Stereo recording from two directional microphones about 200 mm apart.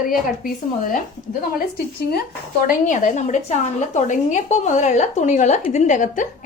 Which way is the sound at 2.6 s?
40° left (ahead or behind).